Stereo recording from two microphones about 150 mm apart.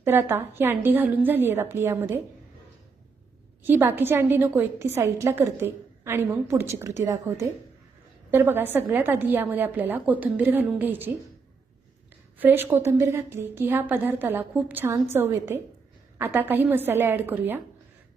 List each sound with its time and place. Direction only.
0.0 s a woman's voice: 15° right (ahead or behind)
3.6 s a woman's voice: 15° right (ahead or behind)
12.4 s a woman's voice: 15° right (ahead or behind)